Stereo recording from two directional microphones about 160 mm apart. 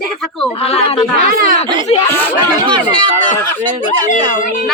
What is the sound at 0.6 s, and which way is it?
Speech, 40° left (ahead or behind).